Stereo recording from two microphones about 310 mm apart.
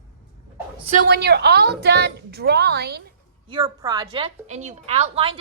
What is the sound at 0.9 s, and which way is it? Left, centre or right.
A woman's voice, right.